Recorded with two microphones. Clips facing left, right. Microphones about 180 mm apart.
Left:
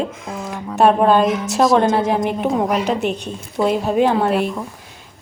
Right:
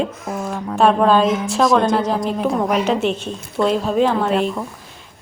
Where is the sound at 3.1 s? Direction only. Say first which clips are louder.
Even; 10° left (ahead or behind).